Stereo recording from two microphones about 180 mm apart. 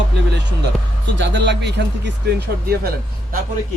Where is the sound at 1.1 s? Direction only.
75° right (ahead or behind).